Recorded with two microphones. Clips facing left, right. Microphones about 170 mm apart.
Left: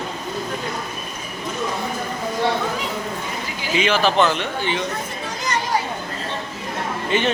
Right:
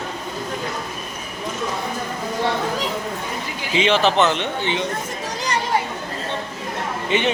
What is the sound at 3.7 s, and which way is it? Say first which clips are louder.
Speech: right 1 dB; 25° right (ahead or behind).